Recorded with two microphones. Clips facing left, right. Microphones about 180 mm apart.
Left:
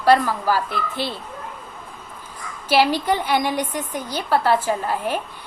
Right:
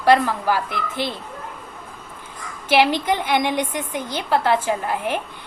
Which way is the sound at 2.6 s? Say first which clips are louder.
Even; 20° right (ahead or behind).